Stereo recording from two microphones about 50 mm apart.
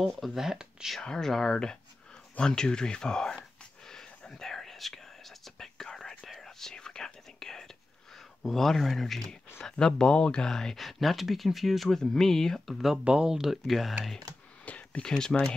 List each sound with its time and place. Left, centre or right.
0.3 s speech: centre
1.0 s speech: centre
3.9 s whispering: centre
8.4 s speech: centre
13.0 s speech: centre
14.6 s a sound: left